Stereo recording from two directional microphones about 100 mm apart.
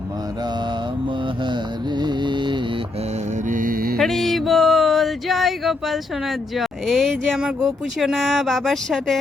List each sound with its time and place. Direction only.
2.0 s music: 50° right (ahead or behind)
3.9 s a sound: centre (ahead or behind)
7.4 s speech: 5° right (ahead or behind)